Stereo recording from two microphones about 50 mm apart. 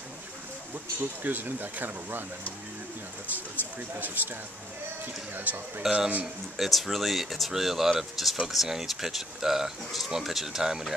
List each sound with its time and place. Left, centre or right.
1.2 s speech: right
4.0 s speech: right
5.8 s speech: centre
6.2 s speech: centre